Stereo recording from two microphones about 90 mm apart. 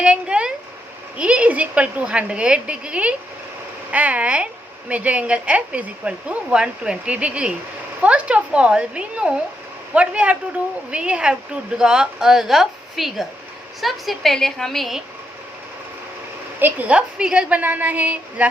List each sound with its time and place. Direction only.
0.0 s a woman's voice: 10° right (ahead or behind)
16.6 s speech: 20° right (ahead or behind)